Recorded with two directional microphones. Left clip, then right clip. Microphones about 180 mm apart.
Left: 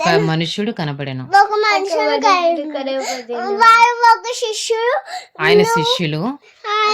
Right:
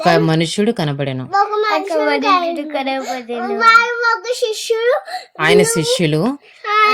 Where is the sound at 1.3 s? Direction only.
40° left (ahead or behind).